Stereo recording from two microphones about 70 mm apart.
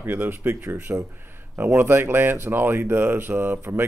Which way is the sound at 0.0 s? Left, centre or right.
Right.